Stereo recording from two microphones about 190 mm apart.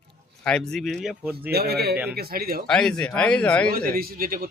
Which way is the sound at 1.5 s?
55° right (ahead or behind).